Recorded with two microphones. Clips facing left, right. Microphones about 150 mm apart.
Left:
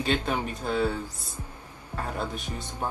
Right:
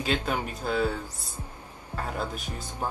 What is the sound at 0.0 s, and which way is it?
Speech, centre (ahead or behind).